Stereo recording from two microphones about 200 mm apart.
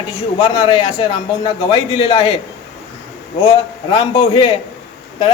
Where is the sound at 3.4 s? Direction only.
25° left (ahead or behind).